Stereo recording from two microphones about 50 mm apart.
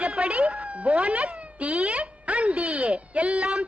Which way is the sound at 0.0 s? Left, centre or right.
Right.